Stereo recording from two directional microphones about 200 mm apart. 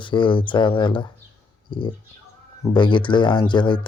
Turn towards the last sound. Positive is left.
turn(degrees=25)  # may be behind; listen again after turning